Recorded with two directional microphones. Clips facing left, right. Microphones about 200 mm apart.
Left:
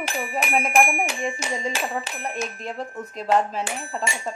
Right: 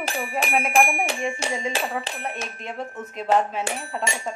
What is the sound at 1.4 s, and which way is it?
Speech, 30° right (ahead or behind).